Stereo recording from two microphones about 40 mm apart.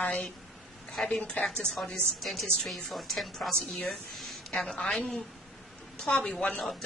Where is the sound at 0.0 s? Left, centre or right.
Left.